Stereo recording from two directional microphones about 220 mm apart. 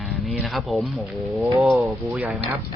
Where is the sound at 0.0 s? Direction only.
Centre (ahead or behind).